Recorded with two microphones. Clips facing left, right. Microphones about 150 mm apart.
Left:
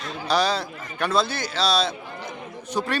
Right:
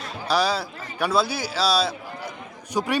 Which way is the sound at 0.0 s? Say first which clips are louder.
Even; 5° right (ahead or behind).